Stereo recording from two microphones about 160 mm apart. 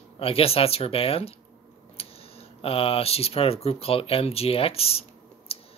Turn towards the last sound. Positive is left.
turn(degrees=35)  # may be behind; listen again after turning